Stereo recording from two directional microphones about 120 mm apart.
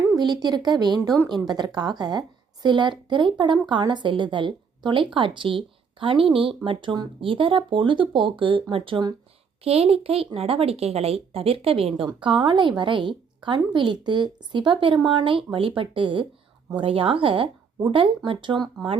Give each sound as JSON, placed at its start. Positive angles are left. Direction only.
{"t": 0.2, "sound": "a woman's voice", "side_deg": -35}
{"t": 9.6, "sound": "a child's voice", "side_deg": -55}